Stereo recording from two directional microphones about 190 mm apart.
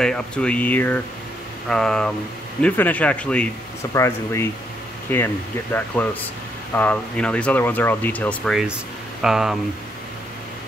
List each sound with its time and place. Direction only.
0.0 s speech: 5° left (ahead or behind)